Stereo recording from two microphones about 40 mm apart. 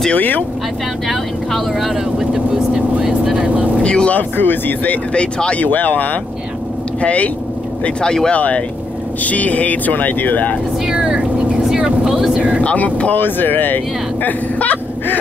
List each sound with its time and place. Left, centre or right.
0.1 s speech: left
1.0 s speech: centre
3.8 s speech: left
4.1 s speech: left
5.1 s speech: left
5.6 s speech: left
7.0 s speech: left
8.0 s speech: centre
8.3 s speech: left
10.9 s speech: centre
12.4 s speech: right
12.6 s speech: left
13.1 s speech: left